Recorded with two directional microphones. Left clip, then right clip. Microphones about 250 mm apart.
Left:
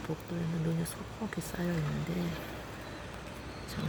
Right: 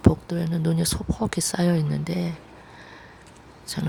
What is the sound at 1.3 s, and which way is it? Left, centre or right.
Speech, right.